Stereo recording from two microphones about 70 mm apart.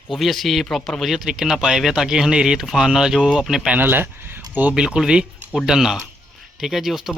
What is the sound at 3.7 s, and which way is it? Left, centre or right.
Speech, right.